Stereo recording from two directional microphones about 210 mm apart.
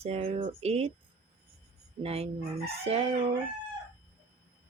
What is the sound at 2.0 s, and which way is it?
Speech, 30° right (ahead or behind).